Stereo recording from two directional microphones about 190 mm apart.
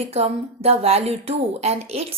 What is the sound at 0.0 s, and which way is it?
A woman's voice, 30° right (ahead or behind).